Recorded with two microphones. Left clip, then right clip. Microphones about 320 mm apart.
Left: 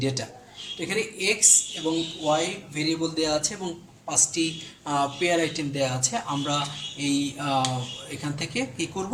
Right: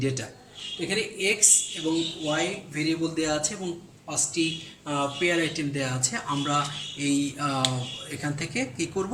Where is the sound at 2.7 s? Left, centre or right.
Centre.